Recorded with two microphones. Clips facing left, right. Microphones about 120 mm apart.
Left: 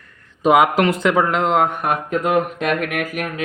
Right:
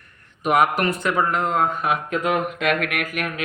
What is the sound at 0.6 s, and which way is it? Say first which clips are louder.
Speech: left 4 dB; 90° left.